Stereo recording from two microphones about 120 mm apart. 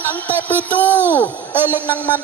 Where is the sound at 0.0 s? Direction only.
15° left (ahead or behind).